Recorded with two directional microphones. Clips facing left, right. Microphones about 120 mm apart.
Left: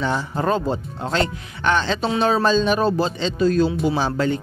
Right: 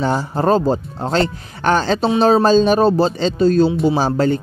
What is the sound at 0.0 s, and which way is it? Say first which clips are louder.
Speech: right 5 dB; 40° right (ahead or behind).